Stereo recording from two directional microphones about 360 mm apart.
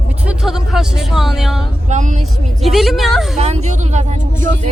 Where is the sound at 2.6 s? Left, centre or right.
Centre.